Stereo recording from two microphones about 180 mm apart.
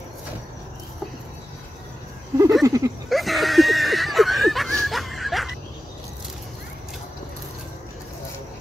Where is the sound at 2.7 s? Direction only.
20° right (ahead or behind).